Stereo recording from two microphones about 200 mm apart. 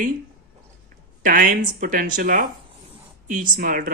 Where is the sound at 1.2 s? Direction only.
40° right (ahead or behind).